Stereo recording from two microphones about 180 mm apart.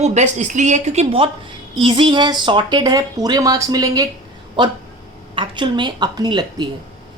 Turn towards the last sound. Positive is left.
turn(degrees=-25)  # may be behind; listen again after turning